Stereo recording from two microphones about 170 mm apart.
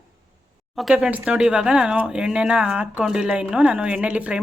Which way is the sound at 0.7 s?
Centre (ahead or behind).